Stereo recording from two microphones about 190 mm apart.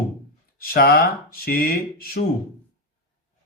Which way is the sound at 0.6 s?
50° left (ahead or behind).